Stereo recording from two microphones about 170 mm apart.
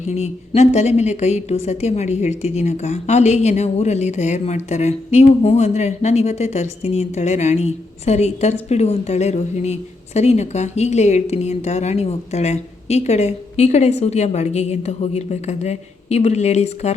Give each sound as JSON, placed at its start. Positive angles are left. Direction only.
{"t": 0.0, "sound": "a woman's voice", "side_deg": 40}